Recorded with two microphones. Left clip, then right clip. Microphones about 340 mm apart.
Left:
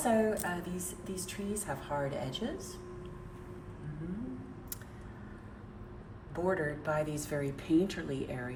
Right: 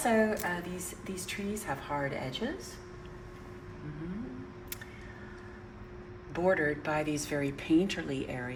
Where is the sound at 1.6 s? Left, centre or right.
Centre.